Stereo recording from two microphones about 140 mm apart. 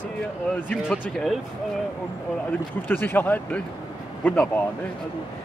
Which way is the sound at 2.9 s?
15° left (ahead or behind).